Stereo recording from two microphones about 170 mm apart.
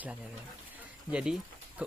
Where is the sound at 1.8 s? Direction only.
10° right (ahead or behind).